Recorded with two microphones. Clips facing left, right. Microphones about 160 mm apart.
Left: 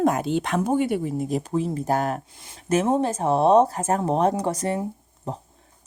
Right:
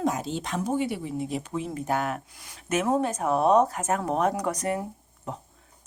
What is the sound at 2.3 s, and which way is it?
Speech, 25° left (ahead or behind).